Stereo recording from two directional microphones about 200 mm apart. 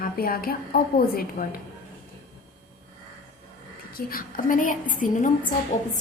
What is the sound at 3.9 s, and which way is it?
A woman's voice, 45° left (ahead or behind).